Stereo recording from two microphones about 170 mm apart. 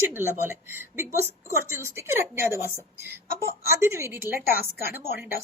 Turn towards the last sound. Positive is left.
turn(degrees=-10)  # may be behind; listen again after turning